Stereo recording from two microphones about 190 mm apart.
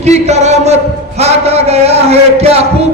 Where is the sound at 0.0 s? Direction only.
35° right (ahead or behind).